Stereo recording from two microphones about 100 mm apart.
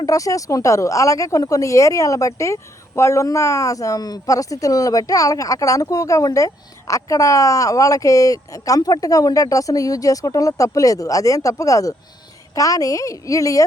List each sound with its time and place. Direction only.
0.0 s speech: 35° left (ahead or behind)